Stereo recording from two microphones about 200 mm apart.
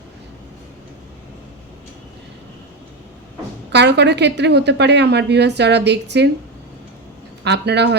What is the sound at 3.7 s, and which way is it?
A woman's voice, 60° right (ahead or behind).